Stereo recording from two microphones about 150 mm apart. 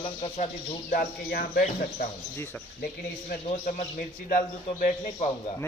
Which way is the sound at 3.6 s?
70° left (ahead or behind).